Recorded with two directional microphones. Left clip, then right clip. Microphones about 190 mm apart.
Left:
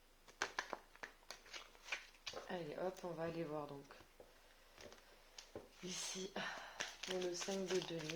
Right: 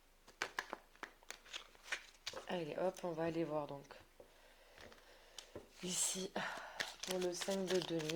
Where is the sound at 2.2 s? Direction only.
50° right (ahead or behind).